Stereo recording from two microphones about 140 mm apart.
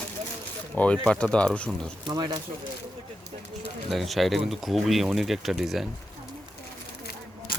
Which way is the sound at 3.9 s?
Centre (ahead or behind).